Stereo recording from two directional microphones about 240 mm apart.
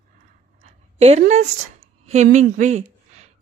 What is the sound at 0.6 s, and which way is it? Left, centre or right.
A woman's voice, right.